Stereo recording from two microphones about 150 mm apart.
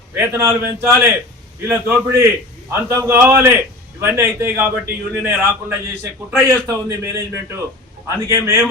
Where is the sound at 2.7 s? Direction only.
20° right (ahead or behind).